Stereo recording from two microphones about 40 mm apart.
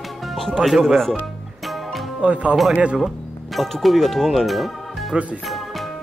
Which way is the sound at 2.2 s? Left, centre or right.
Right.